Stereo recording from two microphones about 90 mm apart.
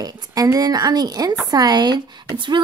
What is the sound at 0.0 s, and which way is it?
Speech, 45° right (ahead or behind).